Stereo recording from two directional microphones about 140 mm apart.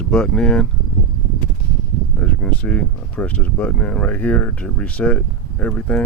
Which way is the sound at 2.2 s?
10° left (ahead or behind).